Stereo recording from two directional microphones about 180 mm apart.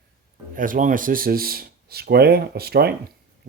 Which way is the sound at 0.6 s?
45° right (ahead or behind).